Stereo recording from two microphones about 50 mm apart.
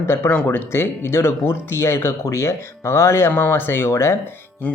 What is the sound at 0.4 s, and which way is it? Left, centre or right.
Speech, left.